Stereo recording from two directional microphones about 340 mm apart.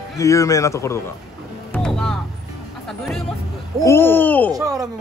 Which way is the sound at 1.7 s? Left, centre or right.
Centre.